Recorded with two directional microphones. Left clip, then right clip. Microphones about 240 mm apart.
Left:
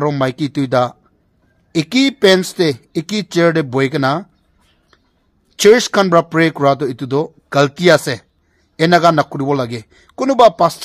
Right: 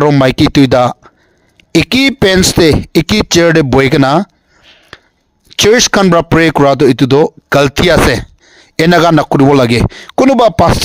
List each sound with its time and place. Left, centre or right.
0.0 s speech: right